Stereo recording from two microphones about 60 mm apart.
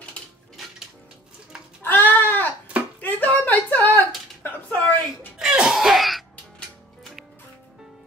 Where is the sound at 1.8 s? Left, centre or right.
Left.